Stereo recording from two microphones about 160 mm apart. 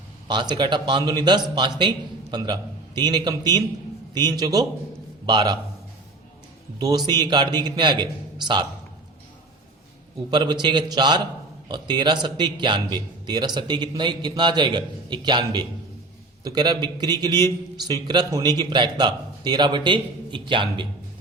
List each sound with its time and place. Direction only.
0.3 s a man's voice: 30° right (ahead or behind)
6.7 s a man's voice: 25° right (ahead or behind)
10.3 s a man's voice: 30° right (ahead or behind)